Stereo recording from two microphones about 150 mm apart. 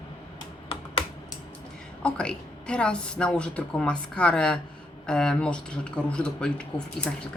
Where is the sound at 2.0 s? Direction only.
5° left (ahead or behind).